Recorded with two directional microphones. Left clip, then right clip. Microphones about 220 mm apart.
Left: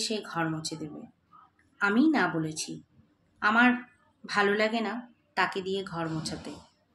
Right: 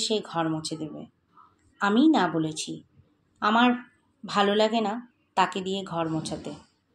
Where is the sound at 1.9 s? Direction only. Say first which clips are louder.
Right 5 dB; 5° left (ahead or behind).